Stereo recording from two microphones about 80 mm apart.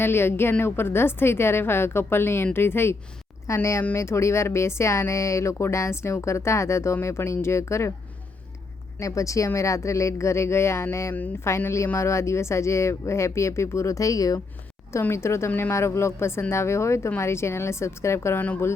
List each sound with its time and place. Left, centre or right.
0.0 s a woman's voice: left
9.0 s speech: left
15.1 s speech: left